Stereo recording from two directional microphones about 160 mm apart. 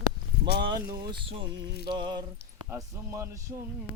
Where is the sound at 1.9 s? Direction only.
25° right (ahead or behind).